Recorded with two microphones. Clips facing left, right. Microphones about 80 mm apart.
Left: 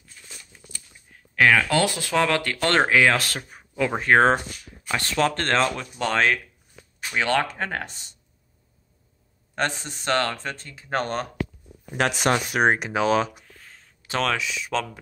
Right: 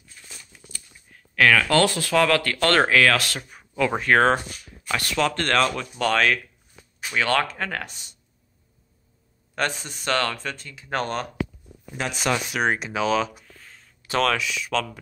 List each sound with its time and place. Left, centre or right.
1.3 s speech: centre
3.2 s speech: left
3.7 s speech: centre
6.7 s a sound: centre
7.2 s speech: centre
9.6 s speech: left
12.0 s speech: left
12.3 s speech: left
14.0 s speech: left